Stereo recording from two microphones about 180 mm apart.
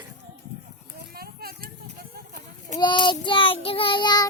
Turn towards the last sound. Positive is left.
turn(degrees=25)  # may be behind; listen again after turning